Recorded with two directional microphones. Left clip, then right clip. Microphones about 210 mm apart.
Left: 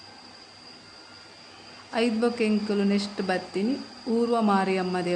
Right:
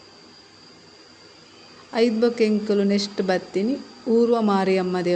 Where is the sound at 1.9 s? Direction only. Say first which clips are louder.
Right 5 dB; 10° right (ahead or behind).